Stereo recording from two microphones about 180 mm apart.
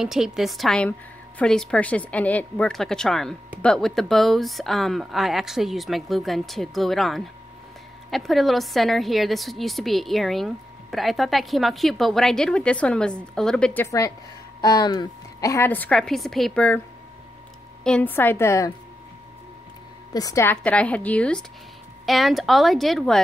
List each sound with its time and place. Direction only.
0.0 s a woman's voice: centre (ahead or behind)
17.8 s a woman's voice: 10° left (ahead or behind)
20.1 s a woman's voice: 20° left (ahead or behind); by 23.2 s centre (ahead or behind)